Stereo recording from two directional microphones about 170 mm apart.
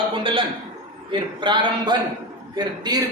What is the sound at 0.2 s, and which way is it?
Speech, 30° right (ahead or behind).